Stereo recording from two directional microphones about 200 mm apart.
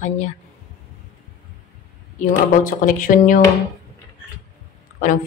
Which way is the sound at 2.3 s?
40° left (ahead or behind).